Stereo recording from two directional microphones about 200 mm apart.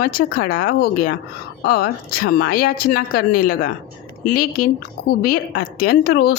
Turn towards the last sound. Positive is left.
turn(degrees=50)  # may be behind; listen again after turning